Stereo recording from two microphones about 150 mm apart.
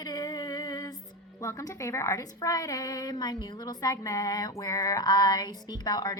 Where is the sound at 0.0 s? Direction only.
25° left (ahead or behind).